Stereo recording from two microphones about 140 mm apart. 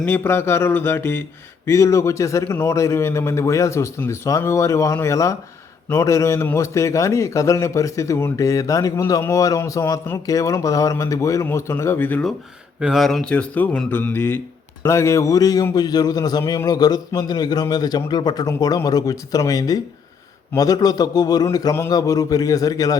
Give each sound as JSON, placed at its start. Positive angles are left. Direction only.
{"t": 0.0, "sound": "a man's voice", "side_deg": 15}
{"t": 12.8, "sound": "a man's voice", "side_deg": 0}